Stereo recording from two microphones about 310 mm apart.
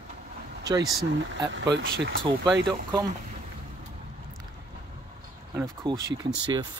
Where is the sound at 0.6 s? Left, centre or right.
Centre.